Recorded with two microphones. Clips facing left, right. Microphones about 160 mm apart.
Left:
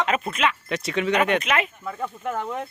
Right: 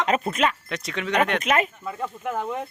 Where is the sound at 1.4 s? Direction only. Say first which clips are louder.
Right 2 dB; 40° right (ahead or behind).